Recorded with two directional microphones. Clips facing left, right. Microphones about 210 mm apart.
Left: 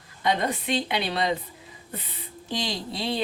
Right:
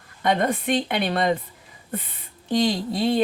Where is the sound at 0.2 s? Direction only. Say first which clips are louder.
Right 4 dB; 55° right (ahead or behind).